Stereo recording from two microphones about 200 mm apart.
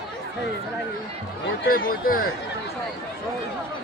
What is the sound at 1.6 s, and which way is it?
Speech, 45° left (ahead or behind).